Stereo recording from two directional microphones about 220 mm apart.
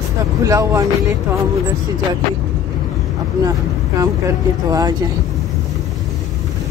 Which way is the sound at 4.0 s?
15° right (ahead or behind).